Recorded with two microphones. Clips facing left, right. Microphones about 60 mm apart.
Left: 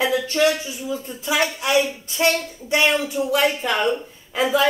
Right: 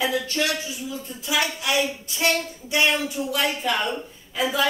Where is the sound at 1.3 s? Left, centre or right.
Left.